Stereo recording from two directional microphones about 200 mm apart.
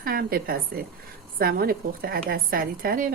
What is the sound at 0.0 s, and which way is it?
A woman's voice, 45° right (ahead or behind).